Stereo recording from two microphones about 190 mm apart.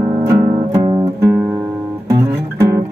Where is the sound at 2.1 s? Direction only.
15° right (ahead or behind).